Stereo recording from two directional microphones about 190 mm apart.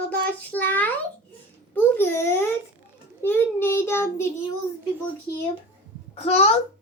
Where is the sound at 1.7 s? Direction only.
10° left (ahead or behind).